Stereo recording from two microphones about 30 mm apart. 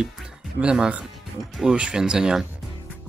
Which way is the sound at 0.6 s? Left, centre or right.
Right.